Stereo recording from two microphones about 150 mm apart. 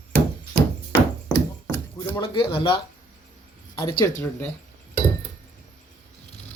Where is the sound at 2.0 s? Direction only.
25° left (ahead or behind).